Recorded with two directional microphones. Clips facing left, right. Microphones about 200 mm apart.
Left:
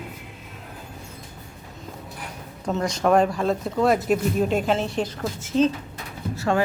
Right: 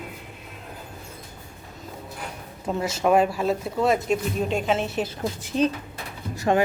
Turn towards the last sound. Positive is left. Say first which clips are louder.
# right 1 dB
turn(degrees=-15)  # may be behind; listen again after turning